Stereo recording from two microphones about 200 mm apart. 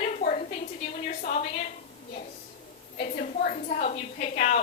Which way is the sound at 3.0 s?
40° left (ahead or behind).